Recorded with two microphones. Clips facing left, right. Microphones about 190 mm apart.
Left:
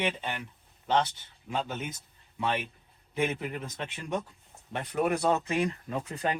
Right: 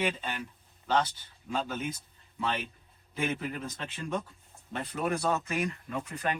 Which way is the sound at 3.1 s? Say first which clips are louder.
Left 2 dB; 20° left (ahead or behind).